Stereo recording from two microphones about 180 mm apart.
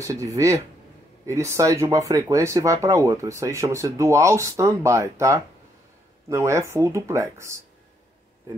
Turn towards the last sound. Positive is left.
turn(degrees=-15)  # may be behind; listen again after turning